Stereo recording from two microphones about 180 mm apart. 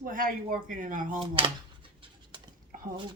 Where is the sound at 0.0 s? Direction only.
50° right (ahead or behind).